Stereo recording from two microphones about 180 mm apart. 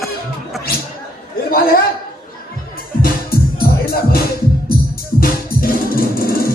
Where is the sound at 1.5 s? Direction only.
55° left (ahead or behind).